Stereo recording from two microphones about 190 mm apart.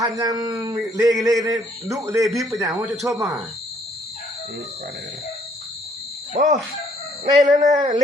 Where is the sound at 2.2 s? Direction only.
Centre (ahead or behind).